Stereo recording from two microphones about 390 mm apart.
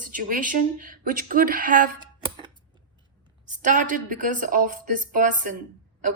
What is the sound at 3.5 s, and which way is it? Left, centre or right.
A woman's voice, centre.